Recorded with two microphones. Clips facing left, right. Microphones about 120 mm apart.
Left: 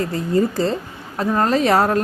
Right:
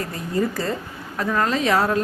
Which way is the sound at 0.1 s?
30° left (ahead or behind).